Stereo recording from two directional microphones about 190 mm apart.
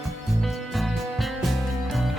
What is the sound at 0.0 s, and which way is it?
Music, centre (ahead or behind).